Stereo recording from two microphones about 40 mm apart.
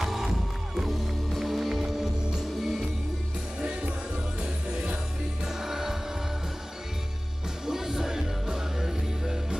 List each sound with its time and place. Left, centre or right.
0.0 s music: centre
1.8 s music: centre
4.4 s music: centre
7.6 s music: centre